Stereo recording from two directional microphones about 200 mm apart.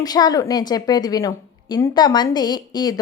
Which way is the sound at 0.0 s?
20° left (ahead or behind).